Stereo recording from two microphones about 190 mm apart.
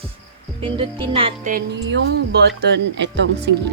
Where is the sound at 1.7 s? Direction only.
65° right (ahead or behind).